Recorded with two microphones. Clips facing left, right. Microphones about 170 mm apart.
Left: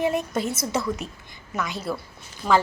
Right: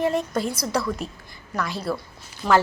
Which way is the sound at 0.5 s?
25° left (ahead or behind).